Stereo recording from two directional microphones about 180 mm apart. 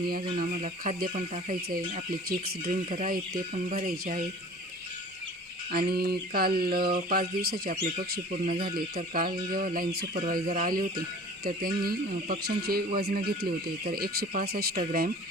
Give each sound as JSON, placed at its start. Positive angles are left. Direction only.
{"t": 0.1, "sound": "speech", "side_deg": -50}
{"t": 5.7, "sound": "speech", "side_deg": -60}
{"t": 11.4, "sound": "speech", "side_deg": -55}